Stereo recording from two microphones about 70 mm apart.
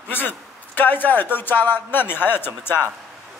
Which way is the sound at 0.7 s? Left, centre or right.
Left.